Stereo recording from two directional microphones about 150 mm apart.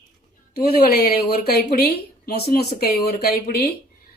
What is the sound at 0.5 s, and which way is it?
A woman's voice, 90° left.